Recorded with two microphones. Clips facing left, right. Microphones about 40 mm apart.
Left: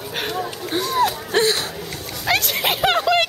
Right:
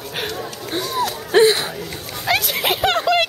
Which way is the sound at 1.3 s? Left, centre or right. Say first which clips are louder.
Right 8 dB; centre.